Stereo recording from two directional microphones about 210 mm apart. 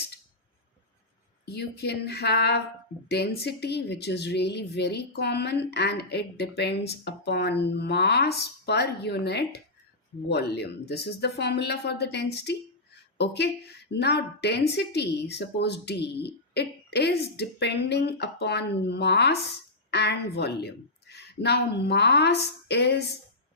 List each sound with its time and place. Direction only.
1.5 s a woman's voice: 50° left (ahead or behind)